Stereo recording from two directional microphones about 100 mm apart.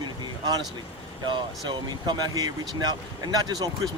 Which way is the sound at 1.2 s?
50° right (ahead or behind).